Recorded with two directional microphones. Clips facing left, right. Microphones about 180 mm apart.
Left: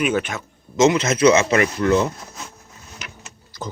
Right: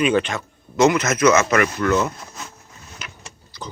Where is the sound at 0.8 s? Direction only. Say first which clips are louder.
Left 1 dB; 25° left (ahead or behind).